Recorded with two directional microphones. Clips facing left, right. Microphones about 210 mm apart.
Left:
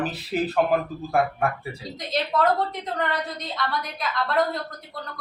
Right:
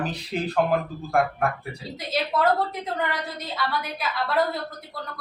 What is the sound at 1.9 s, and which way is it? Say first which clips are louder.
A woman's voice: left 1 dB; 5° right (ahead or behind).